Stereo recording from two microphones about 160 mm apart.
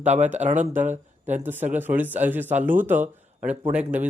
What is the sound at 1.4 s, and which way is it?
Speech, 10° right (ahead or behind).